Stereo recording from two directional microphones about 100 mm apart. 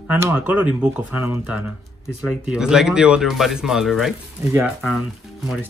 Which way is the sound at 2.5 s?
5° right (ahead or behind).